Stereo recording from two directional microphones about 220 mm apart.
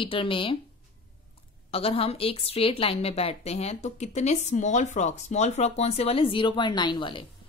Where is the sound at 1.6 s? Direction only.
25° left (ahead or behind).